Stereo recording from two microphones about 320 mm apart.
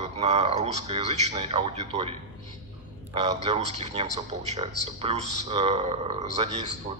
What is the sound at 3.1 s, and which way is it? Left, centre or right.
A man's voice, centre.